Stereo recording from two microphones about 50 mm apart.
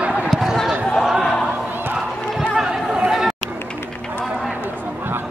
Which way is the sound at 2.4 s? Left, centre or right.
Centre.